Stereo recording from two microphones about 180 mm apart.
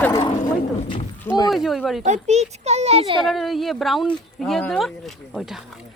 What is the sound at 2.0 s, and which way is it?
A child's voice, 40° right (ahead or behind).